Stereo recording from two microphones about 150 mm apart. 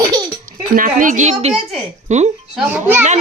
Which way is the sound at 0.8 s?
60° right (ahead or behind).